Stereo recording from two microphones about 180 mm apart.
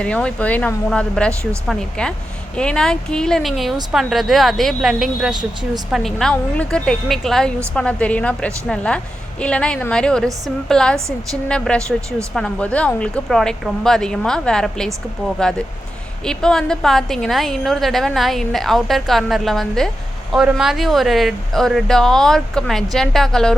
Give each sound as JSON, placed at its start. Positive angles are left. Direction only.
{"t": 0.0, "sound": "a woman's voice", "side_deg": 5}
{"t": 5.3, "sound": "speech", "side_deg": -25}
{"t": 5.9, "sound": "a woman's voice", "side_deg": 0}
{"t": 16.2, "sound": "a woman's voice", "side_deg": 5}